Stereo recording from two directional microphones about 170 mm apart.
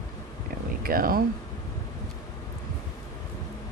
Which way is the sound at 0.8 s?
60° right (ahead or behind).